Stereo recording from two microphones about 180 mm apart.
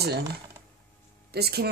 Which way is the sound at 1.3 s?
60° right (ahead or behind).